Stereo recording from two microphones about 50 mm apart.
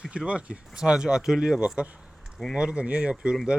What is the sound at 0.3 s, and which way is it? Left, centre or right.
Speech, right.